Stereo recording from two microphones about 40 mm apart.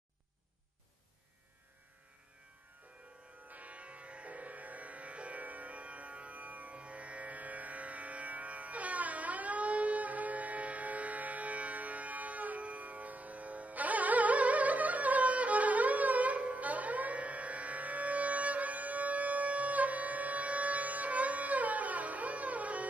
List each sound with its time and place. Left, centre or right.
3.4 s music: right